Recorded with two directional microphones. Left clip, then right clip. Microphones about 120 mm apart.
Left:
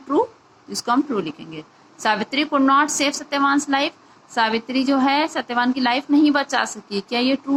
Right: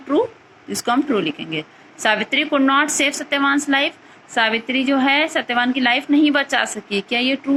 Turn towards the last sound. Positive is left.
turn(degrees=-15)  # may be behind; listen again after turning